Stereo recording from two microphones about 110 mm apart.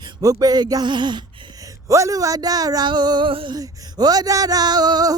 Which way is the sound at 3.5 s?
35° right (ahead or behind).